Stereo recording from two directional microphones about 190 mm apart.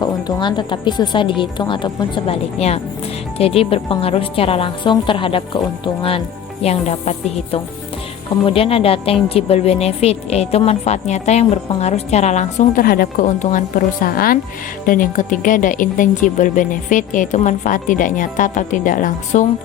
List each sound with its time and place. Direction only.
0.0 s a woman's voice: 20° left (ahead or behind); by 19.5 s 40° left (ahead or behind)